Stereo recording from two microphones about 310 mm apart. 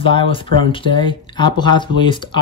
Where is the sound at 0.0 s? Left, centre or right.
Centre.